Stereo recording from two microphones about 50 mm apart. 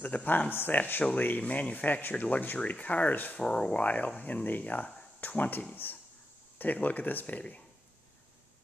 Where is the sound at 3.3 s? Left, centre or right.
Centre.